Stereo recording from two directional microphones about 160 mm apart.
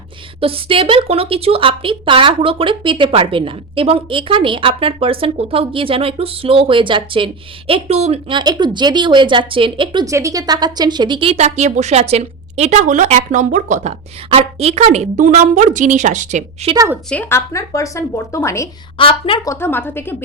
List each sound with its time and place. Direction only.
0.3 s a woman's voice: 35° right (ahead or behind)
7.7 s a woman's voice: 40° right (ahead or behind)
16.7 s a woman's voice: 20° right (ahead or behind)
17.1 s speech: 10° left (ahead or behind)
18.9 s speech: 35° left (ahead or behind)
19.5 s a woman's voice: 15° left (ahead or behind)